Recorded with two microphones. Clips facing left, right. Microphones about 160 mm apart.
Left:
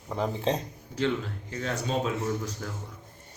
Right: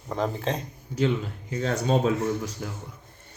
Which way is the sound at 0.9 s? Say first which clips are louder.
Right 3 dB; 10° right (ahead or behind).